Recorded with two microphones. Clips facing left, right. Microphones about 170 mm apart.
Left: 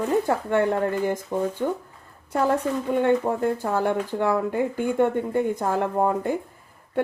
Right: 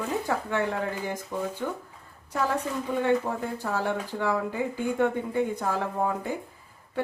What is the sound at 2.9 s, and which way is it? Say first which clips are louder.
Speech: left 4 dB; 55° left (ahead or behind).